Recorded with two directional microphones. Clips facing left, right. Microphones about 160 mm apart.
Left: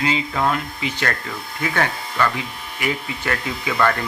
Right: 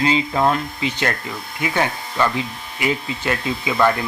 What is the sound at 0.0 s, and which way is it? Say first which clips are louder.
Speech: right 3 dB; 30° right (ahead or behind).